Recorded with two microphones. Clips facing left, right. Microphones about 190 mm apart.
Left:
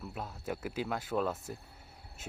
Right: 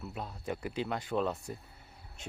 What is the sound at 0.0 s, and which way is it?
Speech, centre (ahead or behind).